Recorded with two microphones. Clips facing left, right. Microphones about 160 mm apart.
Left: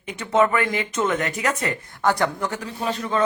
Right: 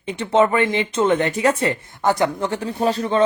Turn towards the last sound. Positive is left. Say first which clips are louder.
# right 5 dB
turn(degrees=-30)  # may be behind; listen again after turning